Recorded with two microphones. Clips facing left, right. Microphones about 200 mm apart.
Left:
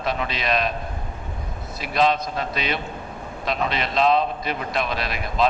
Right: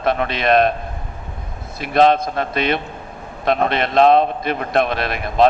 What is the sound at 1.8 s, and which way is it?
A man's voice, 55° right (ahead or behind).